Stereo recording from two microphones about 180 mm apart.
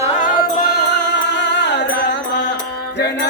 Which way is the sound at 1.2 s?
75° left (ahead or behind).